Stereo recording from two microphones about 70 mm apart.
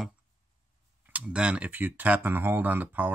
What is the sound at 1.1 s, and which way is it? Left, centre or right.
Speech, centre.